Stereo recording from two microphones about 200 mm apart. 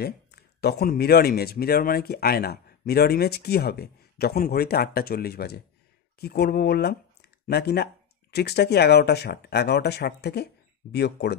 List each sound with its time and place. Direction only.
0.0 s speech: 50° left (ahead or behind)